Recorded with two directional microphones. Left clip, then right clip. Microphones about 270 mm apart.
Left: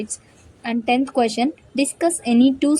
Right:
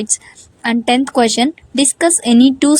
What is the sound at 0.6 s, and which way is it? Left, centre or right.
A woman's voice, right.